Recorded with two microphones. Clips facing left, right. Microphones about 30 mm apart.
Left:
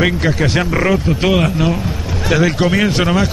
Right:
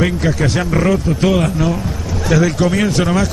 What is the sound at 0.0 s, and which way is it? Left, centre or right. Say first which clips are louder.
Speech: left 1 dB; left.